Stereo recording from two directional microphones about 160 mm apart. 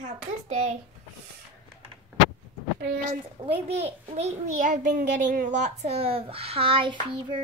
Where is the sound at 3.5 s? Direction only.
35° right (ahead or behind).